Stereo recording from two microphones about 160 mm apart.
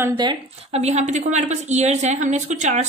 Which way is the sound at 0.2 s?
30° right (ahead or behind).